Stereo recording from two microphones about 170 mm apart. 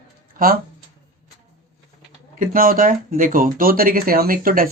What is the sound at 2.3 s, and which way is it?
Speech, 55° right (ahead or behind).